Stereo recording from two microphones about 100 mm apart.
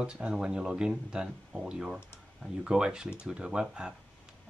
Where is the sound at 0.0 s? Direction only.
10° right (ahead or behind).